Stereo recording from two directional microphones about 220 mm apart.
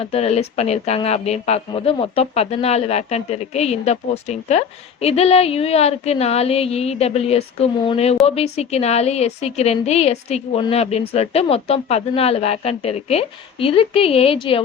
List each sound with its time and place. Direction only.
0.0 s speech: 25° left (ahead or behind)